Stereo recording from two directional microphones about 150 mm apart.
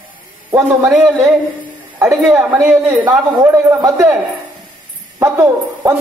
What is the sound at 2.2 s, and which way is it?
Speech, 5° right (ahead or behind).